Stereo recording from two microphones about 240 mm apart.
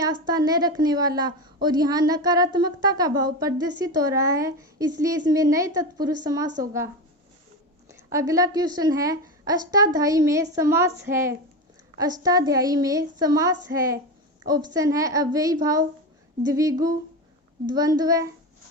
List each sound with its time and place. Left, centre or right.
0.0 s a woman's voice: centre